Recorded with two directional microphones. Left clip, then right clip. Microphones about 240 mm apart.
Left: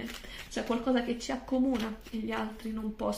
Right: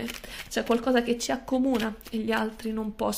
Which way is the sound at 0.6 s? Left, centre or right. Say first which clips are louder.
Right 6 dB; right.